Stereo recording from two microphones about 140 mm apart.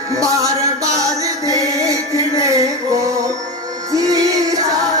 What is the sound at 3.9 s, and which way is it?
Music, 25° right (ahead or behind).